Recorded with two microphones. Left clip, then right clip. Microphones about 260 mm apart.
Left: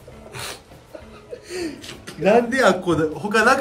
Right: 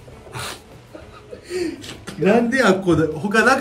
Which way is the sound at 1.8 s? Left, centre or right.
Centre.